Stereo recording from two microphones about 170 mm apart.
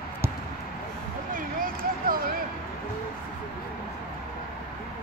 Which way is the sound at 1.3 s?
55° right (ahead or behind).